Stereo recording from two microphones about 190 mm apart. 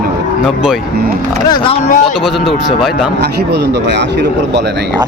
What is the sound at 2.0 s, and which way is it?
Speech, centre (ahead or behind).